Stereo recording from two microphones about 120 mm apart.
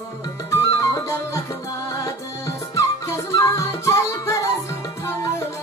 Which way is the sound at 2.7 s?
25° left (ahead or behind).